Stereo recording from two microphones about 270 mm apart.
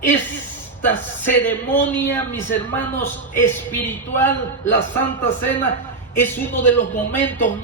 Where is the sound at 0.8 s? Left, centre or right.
Centre.